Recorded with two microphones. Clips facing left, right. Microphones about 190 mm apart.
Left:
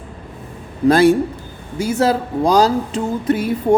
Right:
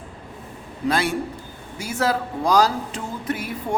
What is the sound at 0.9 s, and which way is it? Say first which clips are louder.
Speech: left 11 dB; 40° left (ahead or behind).